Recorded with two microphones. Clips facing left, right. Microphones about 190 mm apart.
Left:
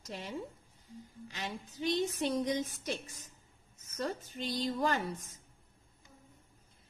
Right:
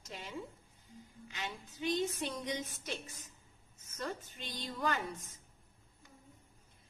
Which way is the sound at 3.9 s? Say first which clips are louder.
Left 5 dB; 35° left (ahead or behind).